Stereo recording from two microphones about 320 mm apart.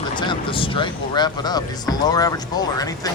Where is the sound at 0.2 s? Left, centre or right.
Centre.